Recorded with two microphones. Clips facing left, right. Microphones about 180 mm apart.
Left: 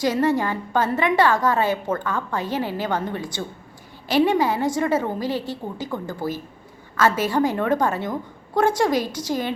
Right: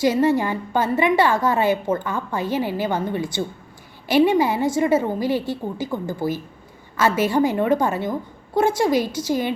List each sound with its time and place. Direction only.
0.0 s a woman's voice: 10° right (ahead or behind)
5.3 s a woman's voice: 50° right (ahead or behind)
5.9 s a woman's voice: 10° right (ahead or behind)